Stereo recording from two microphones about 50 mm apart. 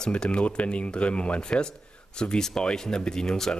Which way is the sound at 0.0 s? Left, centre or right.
Centre.